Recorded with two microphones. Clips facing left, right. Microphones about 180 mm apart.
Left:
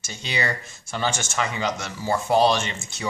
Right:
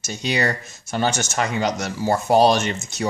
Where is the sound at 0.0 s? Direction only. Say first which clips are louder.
Right 6 dB; 45° right (ahead or behind).